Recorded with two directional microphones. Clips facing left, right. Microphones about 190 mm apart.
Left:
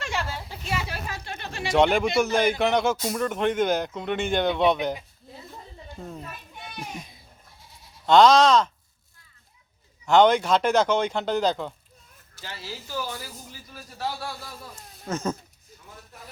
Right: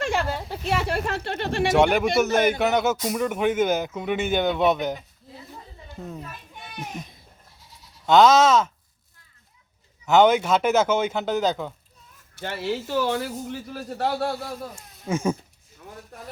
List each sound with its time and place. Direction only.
0.0 s a sound: 55° right (ahead or behind)
1.7 s speech: 5° right (ahead or behind)
6.0 s speech: centre (ahead or behind)
8.0 s speech: 5° right (ahead or behind)
10.1 s speech: 5° right (ahead or behind)
12.4 s speech: 60° right (ahead or behind)
15.0 s speech: 10° right (ahead or behind)